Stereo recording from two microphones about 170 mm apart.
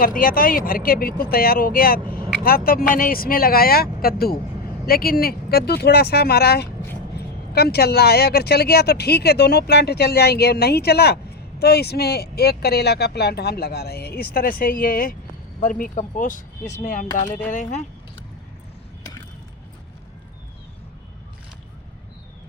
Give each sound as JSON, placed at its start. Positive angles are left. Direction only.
{"t": 0.0, "sound": "speech", "side_deg": 55}